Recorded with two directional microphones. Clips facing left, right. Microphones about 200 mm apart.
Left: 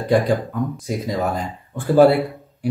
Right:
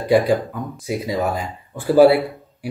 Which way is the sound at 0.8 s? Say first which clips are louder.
Right 5 dB; 5° right (ahead or behind).